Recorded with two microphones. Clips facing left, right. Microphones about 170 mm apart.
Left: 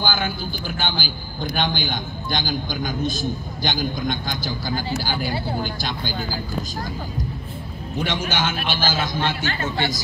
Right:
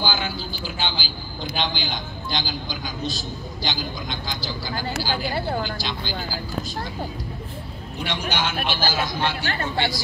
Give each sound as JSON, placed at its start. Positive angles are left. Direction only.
{"t": 0.0, "sound": "a man's voice", "side_deg": 50}
{"t": 8.0, "sound": "speech", "side_deg": 50}